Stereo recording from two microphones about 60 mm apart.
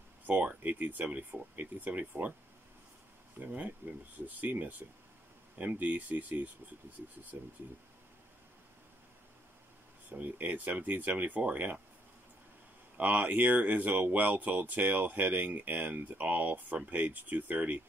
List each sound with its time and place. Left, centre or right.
0.3 s speech: right
3.3 s speech: right
7.3 s speech: right
10.0 s speech: right
12.9 s speech: right